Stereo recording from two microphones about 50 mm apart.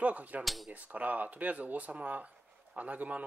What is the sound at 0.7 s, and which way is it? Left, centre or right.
Speech, right.